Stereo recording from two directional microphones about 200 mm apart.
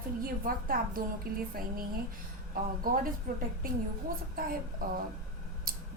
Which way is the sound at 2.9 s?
45° right (ahead or behind).